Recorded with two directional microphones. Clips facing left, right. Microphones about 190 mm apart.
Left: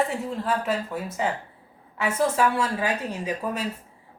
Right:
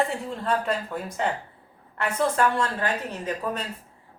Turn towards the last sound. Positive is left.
turn(degrees=10)  # may be behind; listen again after turning